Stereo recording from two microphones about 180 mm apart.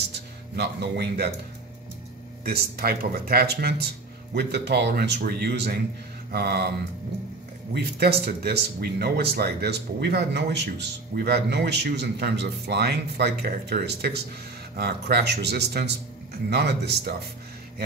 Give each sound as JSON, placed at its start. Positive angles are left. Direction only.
{"t": 0.1, "sound": "speech", "side_deg": -65}
{"t": 2.4, "sound": "speech", "side_deg": -55}
{"t": 7.7, "sound": "speech", "side_deg": -60}